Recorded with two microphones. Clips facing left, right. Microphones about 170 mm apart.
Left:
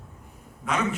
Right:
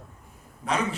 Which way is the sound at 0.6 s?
35° right (ahead or behind).